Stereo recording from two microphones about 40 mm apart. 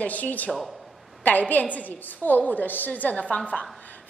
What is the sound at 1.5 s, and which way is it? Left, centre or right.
A woman's voice, left.